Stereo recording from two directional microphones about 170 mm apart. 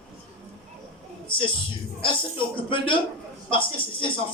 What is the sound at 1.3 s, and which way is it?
A man's voice, 30° left (ahead or behind).